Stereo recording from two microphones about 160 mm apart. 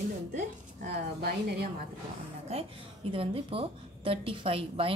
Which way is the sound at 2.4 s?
40° right (ahead or behind).